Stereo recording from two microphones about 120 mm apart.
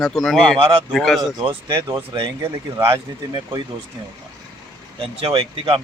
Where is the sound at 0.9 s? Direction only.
Centre (ahead or behind).